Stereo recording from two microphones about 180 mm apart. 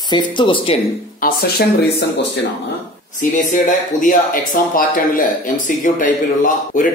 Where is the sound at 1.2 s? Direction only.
55° left (ahead or behind).